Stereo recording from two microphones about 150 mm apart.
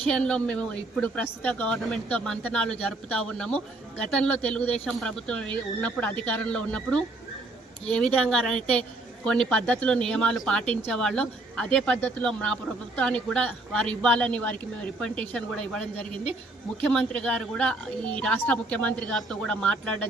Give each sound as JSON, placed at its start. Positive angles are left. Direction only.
{"t": 0.1, "sound": "a woman's voice", "side_deg": 5}